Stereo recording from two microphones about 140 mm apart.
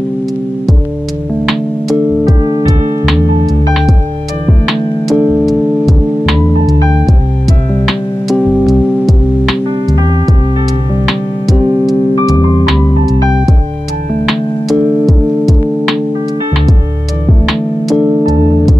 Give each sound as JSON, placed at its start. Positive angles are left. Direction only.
{"t": 1.5, "sound": "music", "side_deg": 0}
{"t": 2.4, "sound": "music", "side_deg": -30}
{"t": 4.6, "sound": "music", "side_deg": 0}
{"t": 7.8, "sound": "music", "side_deg": 0}
{"t": 11.1, "sound": "music", "side_deg": 0}
{"t": 14.2, "sound": "music", "side_deg": 0}
{"t": 17.5, "sound": "music", "side_deg": 0}